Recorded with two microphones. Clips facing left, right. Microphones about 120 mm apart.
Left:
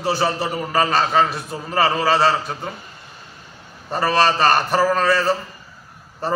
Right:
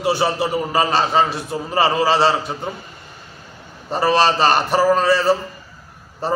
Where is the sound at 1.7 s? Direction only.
25° right (ahead or behind).